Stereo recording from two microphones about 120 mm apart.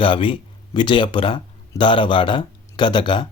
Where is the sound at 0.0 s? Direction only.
45° left (ahead or behind).